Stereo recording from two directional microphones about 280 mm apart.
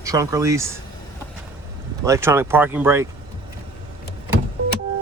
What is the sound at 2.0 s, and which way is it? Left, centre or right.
Speech, centre.